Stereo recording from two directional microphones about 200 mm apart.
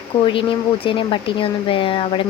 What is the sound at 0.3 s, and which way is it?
Speech, 25° left (ahead or behind).